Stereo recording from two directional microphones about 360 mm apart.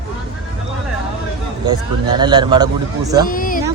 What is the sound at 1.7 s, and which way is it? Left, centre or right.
Speech, centre.